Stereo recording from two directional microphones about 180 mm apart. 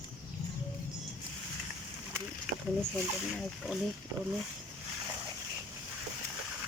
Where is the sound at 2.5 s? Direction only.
Centre (ahead or behind).